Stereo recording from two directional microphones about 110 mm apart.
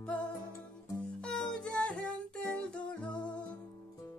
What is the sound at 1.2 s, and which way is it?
Music, 5° left (ahead or behind).